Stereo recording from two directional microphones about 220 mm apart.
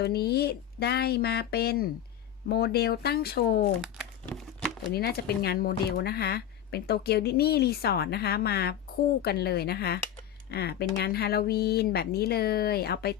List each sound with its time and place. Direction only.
0.0 s speech: 45° left (ahead or behind)
3.8 s crumpling: centre (ahead or behind)
4.9 s speech: 45° left (ahead or behind)